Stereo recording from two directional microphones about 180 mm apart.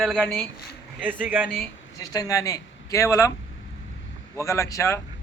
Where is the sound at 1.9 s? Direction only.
20° left (ahead or behind).